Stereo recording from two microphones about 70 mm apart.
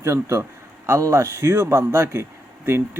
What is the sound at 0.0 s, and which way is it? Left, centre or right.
A man's voice, right.